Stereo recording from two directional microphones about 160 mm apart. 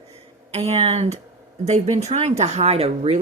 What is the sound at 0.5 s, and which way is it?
Speech, 40° right (ahead or behind).